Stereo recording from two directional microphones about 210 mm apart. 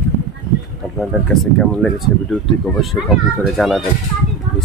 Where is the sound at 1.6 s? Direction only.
5° left (ahead or behind).